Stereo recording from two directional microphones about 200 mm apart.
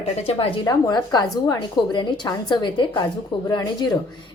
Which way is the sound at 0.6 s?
20° left (ahead or behind).